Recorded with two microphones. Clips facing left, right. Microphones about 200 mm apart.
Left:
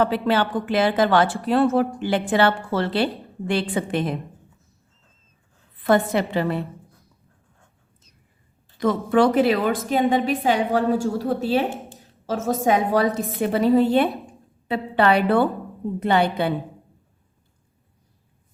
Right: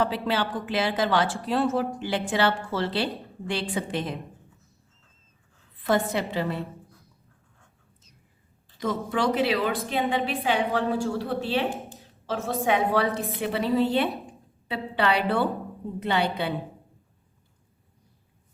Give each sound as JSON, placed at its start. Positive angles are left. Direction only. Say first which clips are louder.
{"t": 0.0, "sound": "speech", "louder": "left 5 dB", "side_deg": 55}
{"t": 5.8, "sound": "speech", "louder": "left 5 dB", "side_deg": 60}
{"t": 8.8, "sound": "a woman's voice", "louder": "left 8 dB", "side_deg": 60}